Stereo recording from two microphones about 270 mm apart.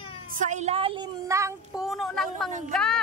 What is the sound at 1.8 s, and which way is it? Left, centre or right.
Speech, centre.